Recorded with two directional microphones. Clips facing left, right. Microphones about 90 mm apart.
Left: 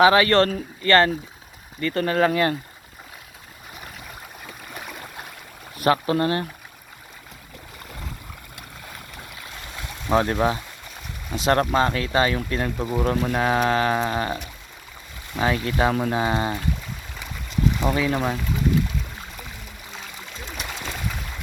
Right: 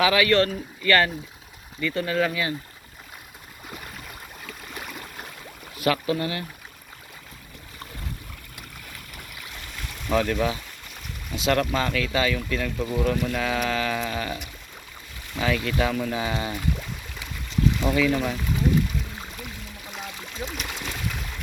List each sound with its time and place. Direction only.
0.0 s speech: 35° left (ahead or behind)
5.8 s speech: 40° left (ahead or behind)
9.8 s a sound: 30° left (ahead or behind)
11.3 s speech: 35° left (ahead or behind)
12.7 s speech: 20° left (ahead or behind)
13.0 s speech: 35° left (ahead or behind)
17.7 s speech: 25° left (ahead or behind)